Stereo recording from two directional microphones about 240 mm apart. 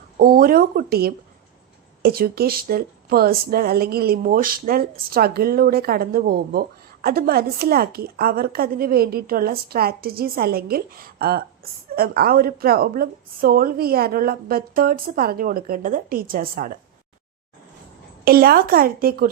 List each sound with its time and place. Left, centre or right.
0.2 s speech: right
18.3 s speech: right